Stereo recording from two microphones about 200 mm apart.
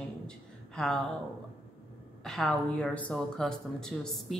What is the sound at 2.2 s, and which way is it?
A woman's voice, centre (ahead or behind).